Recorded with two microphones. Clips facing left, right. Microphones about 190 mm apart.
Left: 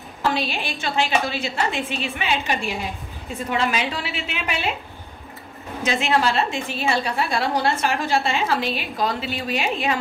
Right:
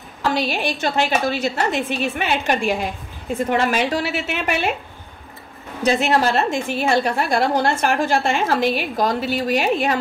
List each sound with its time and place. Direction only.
0.3 s a woman's voice: 45° right (ahead or behind)
5.9 s a woman's voice: 40° right (ahead or behind)